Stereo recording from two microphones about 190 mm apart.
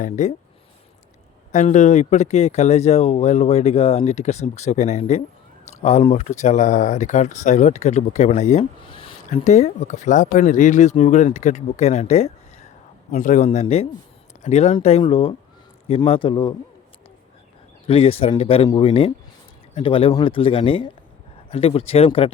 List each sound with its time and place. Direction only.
0.0 s speech: 40° left (ahead or behind)
1.5 s speech: 40° left (ahead or behind)
9.3 s speech: 40° left (ahead or behind)
17.8 s speech: 30° left (ahead or behind)